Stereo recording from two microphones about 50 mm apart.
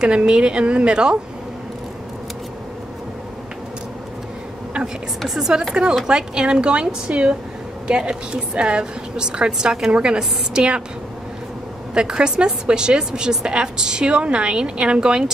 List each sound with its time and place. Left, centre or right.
0.0 s a woman's voice: centre
5.2 s speech: centre
6.0 s a woman's voice: centre
11.9 s a woman's voice: centre